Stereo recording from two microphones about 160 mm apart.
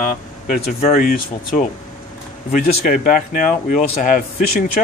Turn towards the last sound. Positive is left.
turn(degrees=55)  # may be behind; listen again after turning